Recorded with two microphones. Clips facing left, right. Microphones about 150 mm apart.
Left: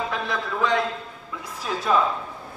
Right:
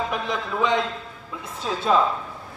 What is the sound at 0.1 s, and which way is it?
A man's voice, 20° right (ahead or behind).